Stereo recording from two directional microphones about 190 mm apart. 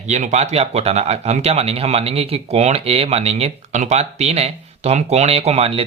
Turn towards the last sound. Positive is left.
turn(degrees=-30)  # may be behind; listen again after turning